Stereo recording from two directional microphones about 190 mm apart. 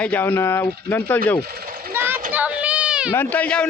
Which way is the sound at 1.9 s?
10° right (ahead or behind).